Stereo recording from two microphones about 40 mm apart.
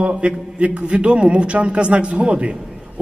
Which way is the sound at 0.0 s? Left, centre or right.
Right.